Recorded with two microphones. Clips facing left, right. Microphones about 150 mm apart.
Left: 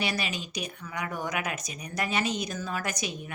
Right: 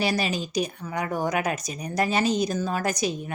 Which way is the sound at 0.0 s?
35° right (ahead or behind).